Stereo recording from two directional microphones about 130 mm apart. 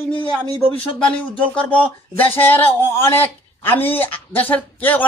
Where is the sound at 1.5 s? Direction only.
10° left (ahead or behind).